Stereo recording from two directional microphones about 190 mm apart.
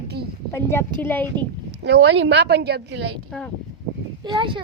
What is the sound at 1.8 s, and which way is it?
Speech, 65° right (ahead or behind).